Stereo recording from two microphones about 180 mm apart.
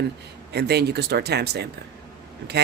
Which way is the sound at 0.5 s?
65° right (ahead or behind).